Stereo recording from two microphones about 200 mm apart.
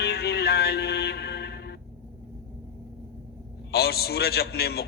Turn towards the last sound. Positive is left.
turn(degrees=50)  # may be behind; listen again after turning